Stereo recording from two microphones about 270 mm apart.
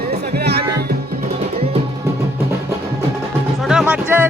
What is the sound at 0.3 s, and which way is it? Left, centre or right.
Music, right.